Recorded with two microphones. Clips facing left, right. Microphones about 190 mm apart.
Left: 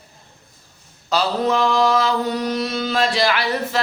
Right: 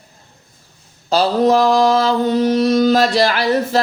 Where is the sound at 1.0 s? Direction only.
35° right (ahead or behind).